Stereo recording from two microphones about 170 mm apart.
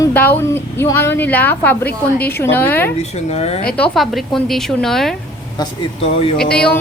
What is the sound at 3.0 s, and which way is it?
Speech, 40° left (ahead or behind).